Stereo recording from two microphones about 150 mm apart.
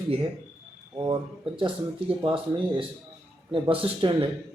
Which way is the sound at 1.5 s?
35° right (ahead or behind).